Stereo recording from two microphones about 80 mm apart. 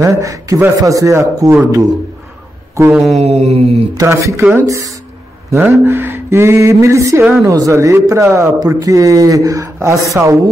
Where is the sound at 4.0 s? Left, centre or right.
Right.